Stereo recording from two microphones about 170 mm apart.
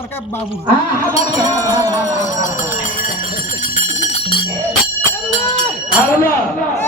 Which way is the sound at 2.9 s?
55° left (ahead or behind).